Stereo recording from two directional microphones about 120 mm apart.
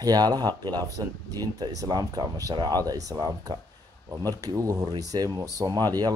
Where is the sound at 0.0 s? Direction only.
35° right (ahead or behind).